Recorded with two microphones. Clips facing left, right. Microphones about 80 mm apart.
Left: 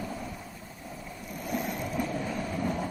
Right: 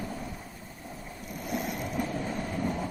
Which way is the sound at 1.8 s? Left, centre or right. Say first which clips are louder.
Left 1 dB; right.